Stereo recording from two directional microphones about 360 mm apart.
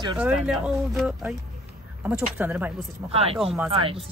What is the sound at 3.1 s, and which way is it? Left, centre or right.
Speech, centre.